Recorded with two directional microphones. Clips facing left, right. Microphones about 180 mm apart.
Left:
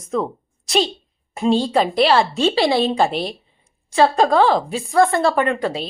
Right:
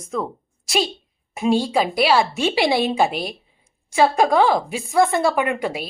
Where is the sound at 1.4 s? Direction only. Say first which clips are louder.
Left 2 dB; 10° right (ahead or behind).